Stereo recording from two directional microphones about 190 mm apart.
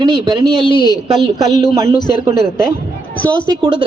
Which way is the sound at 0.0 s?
20° right (ahead or behind).